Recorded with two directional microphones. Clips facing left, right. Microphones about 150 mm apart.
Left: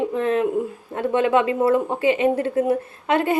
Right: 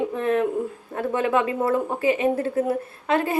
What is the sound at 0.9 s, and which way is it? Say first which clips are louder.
A woman's voice: left 4 dB; 20° left (ahead or behind).